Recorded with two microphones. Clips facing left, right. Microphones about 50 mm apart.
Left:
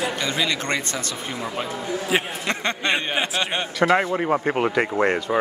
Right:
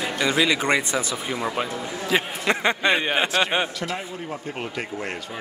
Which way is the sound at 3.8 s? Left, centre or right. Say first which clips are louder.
Left 11 dB; left.